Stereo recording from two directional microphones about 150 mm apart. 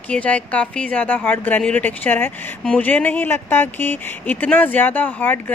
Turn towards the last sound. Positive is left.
turn(degrees=10)  # may be behind; listen again after turning